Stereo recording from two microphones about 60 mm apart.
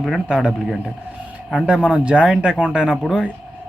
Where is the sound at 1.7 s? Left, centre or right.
Centre.